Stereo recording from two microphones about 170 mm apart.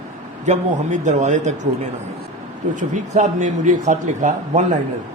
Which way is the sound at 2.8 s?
45° right (ahead or behind).